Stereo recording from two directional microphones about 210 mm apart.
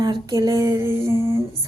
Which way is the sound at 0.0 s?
20° right (ahead or behind).